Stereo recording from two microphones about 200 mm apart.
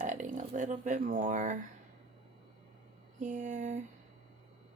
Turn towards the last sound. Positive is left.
turn(degrees=-40)  # may be behind; listen again after turning